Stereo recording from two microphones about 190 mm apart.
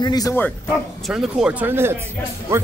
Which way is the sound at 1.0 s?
Centre (ahead or behind).